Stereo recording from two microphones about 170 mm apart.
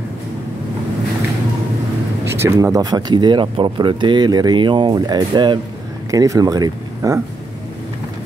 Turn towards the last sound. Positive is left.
turn(degrees=-20)  # may be behind; listen again after turning